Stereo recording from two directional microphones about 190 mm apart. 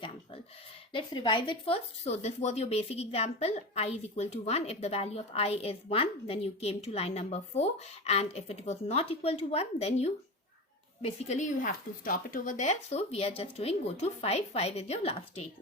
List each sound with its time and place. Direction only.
0.9 s speech: 25° left (ahead or behind)